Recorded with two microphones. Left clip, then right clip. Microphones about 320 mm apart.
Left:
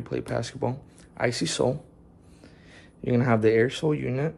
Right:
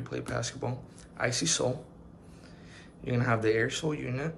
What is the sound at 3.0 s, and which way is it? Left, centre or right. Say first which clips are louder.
Speech: left 6 dB; left.